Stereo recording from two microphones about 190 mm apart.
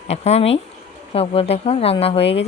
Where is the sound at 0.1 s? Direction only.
35° left (ahead or behind).